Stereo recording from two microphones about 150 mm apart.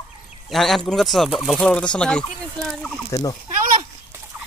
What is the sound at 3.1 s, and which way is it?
Speech, 25° left (ahead or behind).